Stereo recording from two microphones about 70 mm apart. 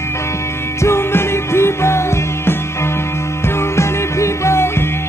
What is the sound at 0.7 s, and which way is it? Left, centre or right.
Music, left.